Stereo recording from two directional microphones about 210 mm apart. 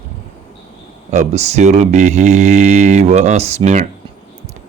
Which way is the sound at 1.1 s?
35° right (ahead or behind).